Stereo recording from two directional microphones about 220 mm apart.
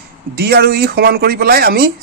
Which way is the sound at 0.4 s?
45° right (ahead or behind).